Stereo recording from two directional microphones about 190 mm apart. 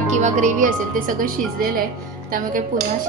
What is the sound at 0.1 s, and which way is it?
A woman's voice, 40° right (ahead or behind).